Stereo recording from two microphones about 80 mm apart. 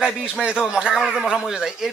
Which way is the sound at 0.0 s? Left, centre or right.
Centre.